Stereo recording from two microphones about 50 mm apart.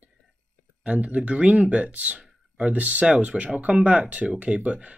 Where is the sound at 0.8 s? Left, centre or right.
Right.